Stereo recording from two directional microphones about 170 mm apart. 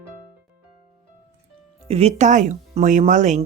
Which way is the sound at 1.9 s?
40° right (ahead or behind).